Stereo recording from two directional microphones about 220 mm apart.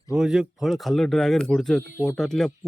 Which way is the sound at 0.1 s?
5° right (ahead or behind).